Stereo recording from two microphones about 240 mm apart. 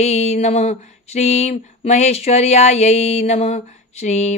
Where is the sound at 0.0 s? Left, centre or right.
Left.